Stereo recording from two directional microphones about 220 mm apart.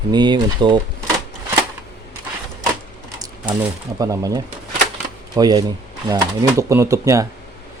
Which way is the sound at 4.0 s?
15° right (ahead or behind).